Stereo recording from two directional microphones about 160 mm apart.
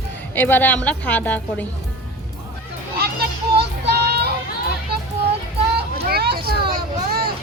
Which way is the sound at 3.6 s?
90° right.